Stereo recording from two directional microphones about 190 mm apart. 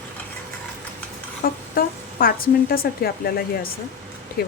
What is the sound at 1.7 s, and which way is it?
A woman's voice, 50° left (ahead or behind).